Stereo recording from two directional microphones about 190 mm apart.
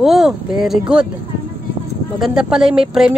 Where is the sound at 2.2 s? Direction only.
5° right (ahead or behind).